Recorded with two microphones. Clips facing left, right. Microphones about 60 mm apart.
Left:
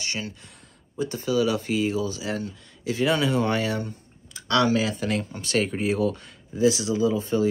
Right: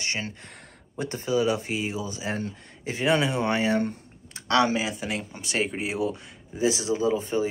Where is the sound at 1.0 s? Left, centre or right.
Right.